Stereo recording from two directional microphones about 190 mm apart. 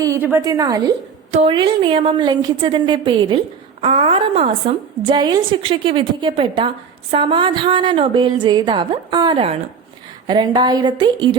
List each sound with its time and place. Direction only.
0.0 s a woman's voice: 15° right (ahead or behind)
1.3 s a woman's voice: 30° right (ahead or behind)